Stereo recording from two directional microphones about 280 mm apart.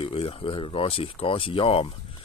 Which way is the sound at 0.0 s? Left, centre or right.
Centre.